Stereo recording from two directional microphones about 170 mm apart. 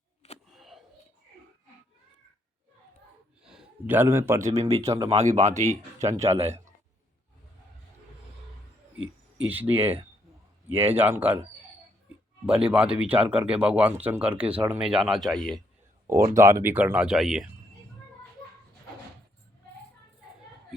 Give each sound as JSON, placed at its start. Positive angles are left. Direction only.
{"t": 0.5, "sound": "a sound", "side_deg": 0}
{"t": 3.4, "sound": "a man's voice", "side_deg": -5}
{"t": 5.0, "sound": "speech", "side_deg": -40}
{"t": 6.0, "sound": "speech", "side_deg": -15}
{"t": 9.4, "sound": "speech", "side_deg": -10}
{"t": 12.5, "sound": "speech", "side_deg": -5}
{"t": 16.0, "sound": "speech", "side_deg": -15}